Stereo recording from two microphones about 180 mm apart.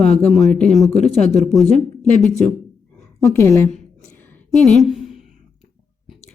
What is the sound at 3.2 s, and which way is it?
Speech, 15° left (ahead or behind).